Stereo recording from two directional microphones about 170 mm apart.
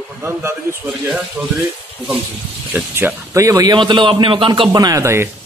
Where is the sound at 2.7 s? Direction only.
10° right (ahead or behind).